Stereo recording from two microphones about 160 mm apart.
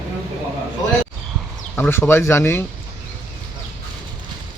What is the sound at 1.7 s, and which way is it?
Speech, 15° left (ahead or behind).